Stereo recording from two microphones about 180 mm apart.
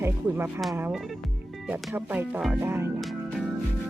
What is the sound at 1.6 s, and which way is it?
Speech, 10° right (ahead or behind).